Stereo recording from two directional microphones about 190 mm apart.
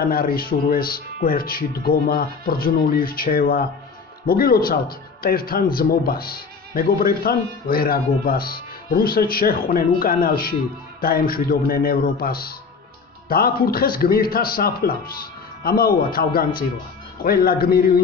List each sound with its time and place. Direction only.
0.0 s a man's voice: 50° left (ahead or behind)